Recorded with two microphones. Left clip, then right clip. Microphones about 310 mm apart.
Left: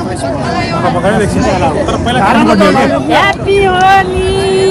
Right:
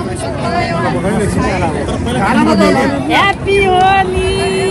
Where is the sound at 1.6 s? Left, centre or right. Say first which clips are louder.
Left 5 dB; centre.